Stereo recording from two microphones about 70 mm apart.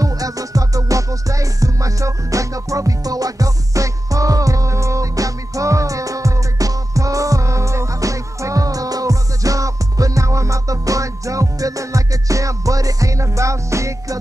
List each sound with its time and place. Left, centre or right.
0.0 s music: right